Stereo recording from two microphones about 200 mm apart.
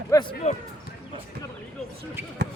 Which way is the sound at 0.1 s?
20° left (ahead or behind).